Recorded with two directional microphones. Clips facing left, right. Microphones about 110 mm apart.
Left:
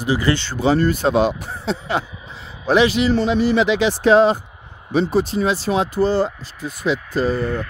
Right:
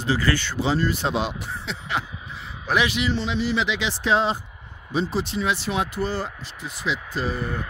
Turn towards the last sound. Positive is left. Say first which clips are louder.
# left 7 dB
turn(degrees=-10)  # may be behind; listen again after turning